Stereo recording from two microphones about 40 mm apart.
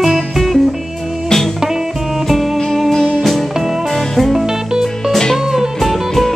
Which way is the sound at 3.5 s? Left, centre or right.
Centre.